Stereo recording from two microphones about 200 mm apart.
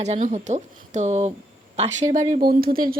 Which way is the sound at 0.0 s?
35° right (ahead or behind).